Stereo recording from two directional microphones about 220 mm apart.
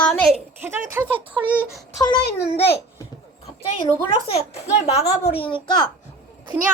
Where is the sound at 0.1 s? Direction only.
Centre (ahead or behind).